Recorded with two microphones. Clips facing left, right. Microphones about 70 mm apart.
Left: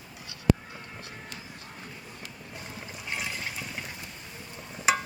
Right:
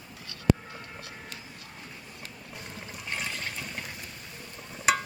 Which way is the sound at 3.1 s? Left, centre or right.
Centre.